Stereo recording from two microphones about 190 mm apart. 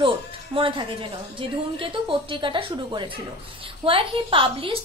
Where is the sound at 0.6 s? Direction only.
25° right (ahead or behind).